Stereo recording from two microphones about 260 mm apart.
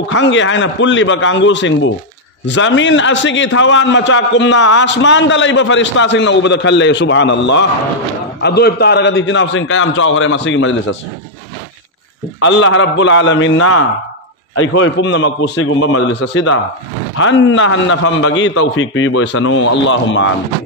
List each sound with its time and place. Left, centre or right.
0.1 s a man's voice: left
12.4 s a man's voice: left